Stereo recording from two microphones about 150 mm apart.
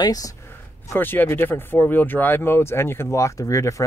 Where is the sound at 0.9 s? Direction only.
15° left (ahead or behind).